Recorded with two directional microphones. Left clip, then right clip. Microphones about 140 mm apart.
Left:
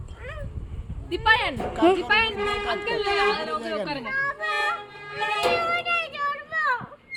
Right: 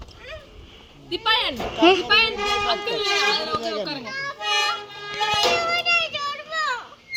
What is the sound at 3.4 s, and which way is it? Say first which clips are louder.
Speech: right 3 dB; 35° left (ahead or behind).